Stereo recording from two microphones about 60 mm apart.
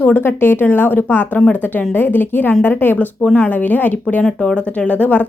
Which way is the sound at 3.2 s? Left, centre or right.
Centre.